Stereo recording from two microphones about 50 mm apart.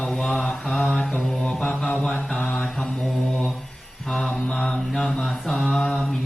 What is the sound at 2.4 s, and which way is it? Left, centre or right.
Mantra, left.